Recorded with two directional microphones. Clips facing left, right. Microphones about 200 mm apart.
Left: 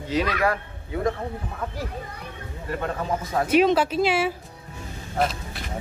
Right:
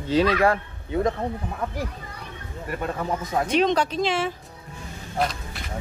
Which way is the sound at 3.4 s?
5° left (ahead or behind).